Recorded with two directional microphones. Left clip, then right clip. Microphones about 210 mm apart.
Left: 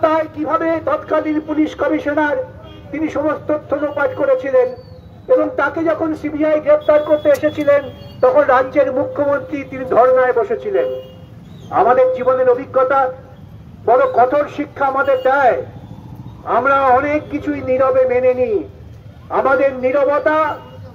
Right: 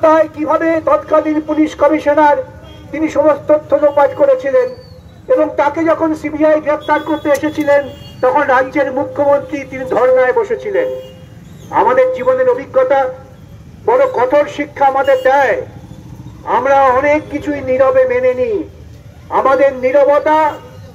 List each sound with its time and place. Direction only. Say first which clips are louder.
0.0 s speech: right 5 dB; 40° left (ahead or behind)